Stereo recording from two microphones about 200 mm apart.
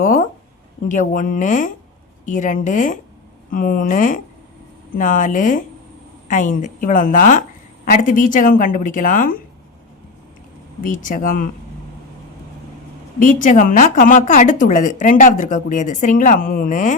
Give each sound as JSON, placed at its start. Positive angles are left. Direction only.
{"t": 0.0, "sound": "a woman's voice", "side_deg": 40}
{"t": 10.8, "sound": "a woman's voice", "side_deg": 40}
{"t": 13.1, "sound": "a woman's voice", "side_deg": 40}